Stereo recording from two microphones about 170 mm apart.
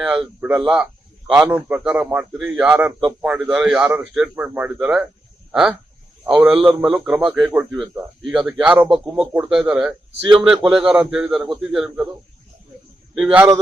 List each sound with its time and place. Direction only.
0.0 s a man's voice: centre (ahead or behind)
10.2 s a man's voice: 30° right (ahead or behind)
10.7 s a man's voice: 5° right (ahead or behind)
13.1 s a man's voice: 5° right (ahead or behind)